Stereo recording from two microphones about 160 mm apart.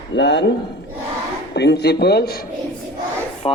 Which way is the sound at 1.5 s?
90° left.